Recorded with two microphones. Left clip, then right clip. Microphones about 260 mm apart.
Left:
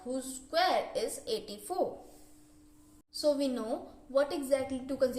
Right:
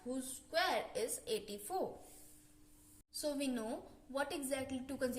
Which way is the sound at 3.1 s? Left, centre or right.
Right.